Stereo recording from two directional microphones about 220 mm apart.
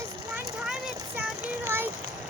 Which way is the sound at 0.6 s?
5° right (ahead or behind).